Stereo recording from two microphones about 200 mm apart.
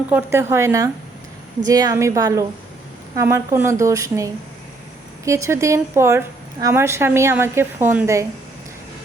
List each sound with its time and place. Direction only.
0.1 s a woman's voice: 10° right (ahead or behind)